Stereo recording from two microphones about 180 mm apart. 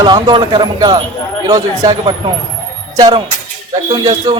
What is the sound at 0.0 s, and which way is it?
Speech, 25° right (ahead or behind).